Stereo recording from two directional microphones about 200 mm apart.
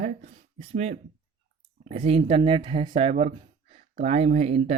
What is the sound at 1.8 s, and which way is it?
Speech, 30° right (ahead or behind).